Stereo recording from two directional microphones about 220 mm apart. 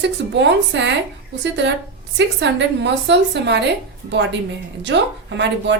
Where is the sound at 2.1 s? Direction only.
55° right (ahead or behind).